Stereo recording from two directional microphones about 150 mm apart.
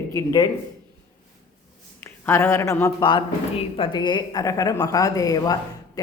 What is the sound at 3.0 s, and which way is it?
Speech, 30° left (ahead or behind).